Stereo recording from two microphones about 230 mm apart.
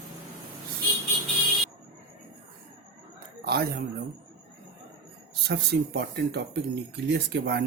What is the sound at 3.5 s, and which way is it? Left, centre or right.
Speech, right.